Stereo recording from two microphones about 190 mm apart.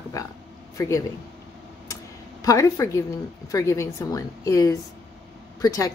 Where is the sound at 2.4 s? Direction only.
15° left (ahead or behind).